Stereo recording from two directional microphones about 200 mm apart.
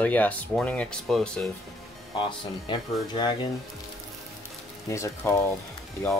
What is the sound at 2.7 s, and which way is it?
Speech, 25° left (ahead or behind).